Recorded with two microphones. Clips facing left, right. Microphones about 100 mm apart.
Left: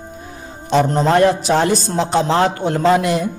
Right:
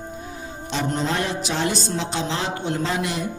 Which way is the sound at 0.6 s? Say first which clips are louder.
Left 10 dB; 45° left (ahead or behind).